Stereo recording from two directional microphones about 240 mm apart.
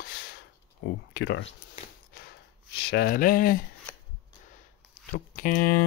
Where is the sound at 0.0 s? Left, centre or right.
Left.